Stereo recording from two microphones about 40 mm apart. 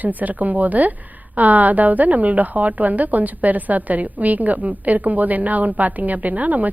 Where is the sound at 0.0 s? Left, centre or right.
Right.